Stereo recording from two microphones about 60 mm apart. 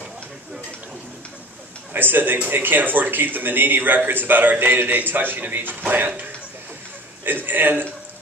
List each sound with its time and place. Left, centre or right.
2.0 s speech: right
7.2 s speech: right